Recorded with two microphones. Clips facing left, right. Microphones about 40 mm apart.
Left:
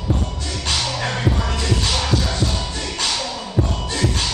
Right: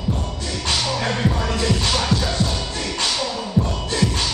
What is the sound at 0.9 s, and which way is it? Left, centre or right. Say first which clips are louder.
Music: right 1 dB; centre.